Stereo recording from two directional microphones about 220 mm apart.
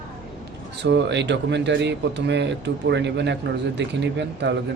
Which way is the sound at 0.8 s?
50° right (ahead or behind).